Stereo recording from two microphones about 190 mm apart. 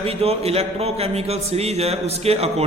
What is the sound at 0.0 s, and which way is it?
A man's voice, 30° right (ahead or behind).